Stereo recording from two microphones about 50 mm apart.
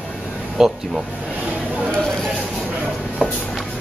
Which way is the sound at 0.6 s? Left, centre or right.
Centre.